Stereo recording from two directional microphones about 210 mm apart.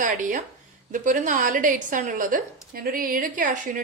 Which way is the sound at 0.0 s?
40° right (ahead or behind).